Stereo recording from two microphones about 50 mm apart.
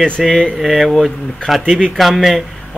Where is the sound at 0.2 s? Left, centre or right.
Centre.